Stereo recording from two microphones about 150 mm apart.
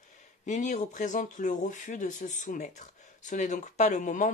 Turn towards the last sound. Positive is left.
turn(degrees=55)  # may be behind; listen again after turning